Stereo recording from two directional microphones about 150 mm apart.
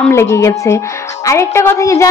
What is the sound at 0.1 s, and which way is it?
A woman's voice, 20° left (ahead or behind).